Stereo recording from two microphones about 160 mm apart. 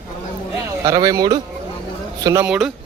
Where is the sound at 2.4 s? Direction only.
5° right (ahead or behind).